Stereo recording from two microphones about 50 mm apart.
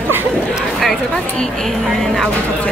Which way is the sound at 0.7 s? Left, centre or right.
Centre.